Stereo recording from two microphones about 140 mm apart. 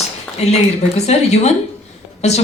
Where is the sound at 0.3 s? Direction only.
50° left (ahead or behind).